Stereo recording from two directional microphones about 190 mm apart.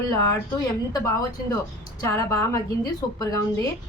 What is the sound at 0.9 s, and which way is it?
A woman's voice, 15° left (ahead or behind).